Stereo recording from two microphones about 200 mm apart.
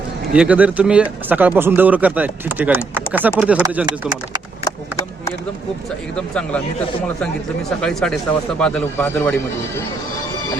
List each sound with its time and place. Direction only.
0.3 s speech: 5° right (ahead or behind)
3.8 s speech: 20° right (ahead or behind)
4.6 s chop: 15° left (ahead or behind)
6.1 s speech: 5° left (ahead or behind)
7.8 s speech: 5° left (ahead or behind)